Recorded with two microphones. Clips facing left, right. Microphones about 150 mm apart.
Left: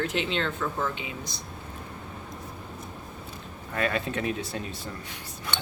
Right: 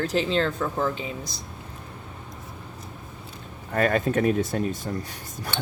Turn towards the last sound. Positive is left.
turn(degrees=-45)  # may be behind; listen again after turning